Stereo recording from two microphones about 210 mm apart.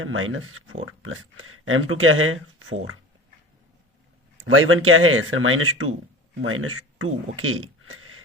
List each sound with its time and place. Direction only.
0.0 s speech: 75° right (ahead or behind)
4.4 s speech: 75° right (ahead or behind)